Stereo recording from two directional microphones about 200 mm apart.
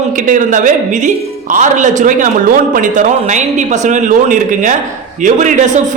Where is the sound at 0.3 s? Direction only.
40° right (ahead or behind).